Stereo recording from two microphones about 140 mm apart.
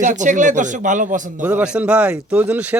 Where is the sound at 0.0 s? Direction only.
65° right (ahead or behind).